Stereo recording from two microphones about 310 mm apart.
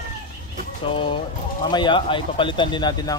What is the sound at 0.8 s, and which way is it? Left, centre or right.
Speech, centre.